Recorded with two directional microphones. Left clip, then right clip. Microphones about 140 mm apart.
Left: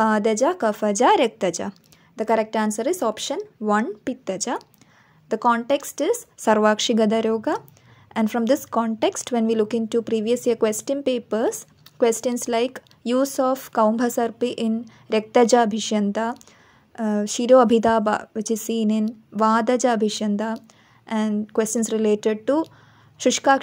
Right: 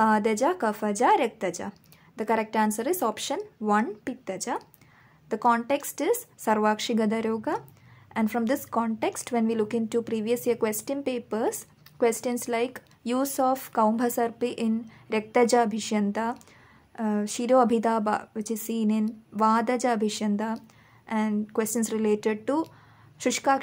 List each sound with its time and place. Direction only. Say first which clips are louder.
0.0 s a woman's voice: left 4 dB; 25° left (ahead or behind)
1.7 s a woman's voice: left 4 dB; 25° left (ahead or behind)
6.4 s a woman's voice: left 7 dB; 35° left (ahead or behind)